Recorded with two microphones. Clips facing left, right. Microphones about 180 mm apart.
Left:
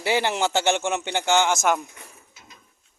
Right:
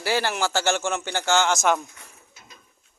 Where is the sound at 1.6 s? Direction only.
5° left (ahead or behind).